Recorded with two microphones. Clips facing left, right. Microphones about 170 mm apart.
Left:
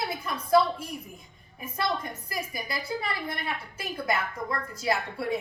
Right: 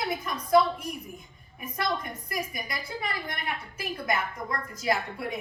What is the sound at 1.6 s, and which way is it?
A woman's voice, 30° left (ahead or behind).